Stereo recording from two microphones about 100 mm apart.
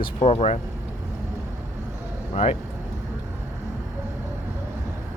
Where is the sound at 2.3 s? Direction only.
90° left.